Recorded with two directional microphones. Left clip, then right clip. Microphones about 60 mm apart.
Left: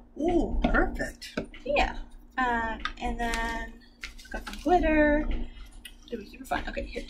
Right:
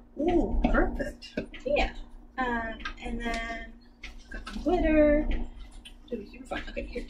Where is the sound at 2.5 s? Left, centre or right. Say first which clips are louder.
Left 4 dB; left.